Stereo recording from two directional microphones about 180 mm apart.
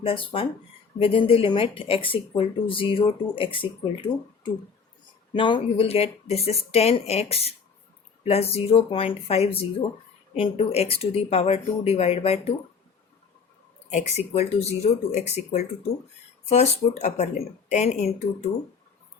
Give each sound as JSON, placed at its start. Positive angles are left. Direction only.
{"t": 0.0, "sound": "speech", "side_deg": 30}
{"t": 13.9, "sound": "speech", "side_deg": 40}